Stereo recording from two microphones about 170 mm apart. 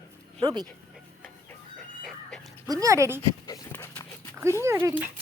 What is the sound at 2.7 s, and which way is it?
Speech, 20° right (ahead or behind).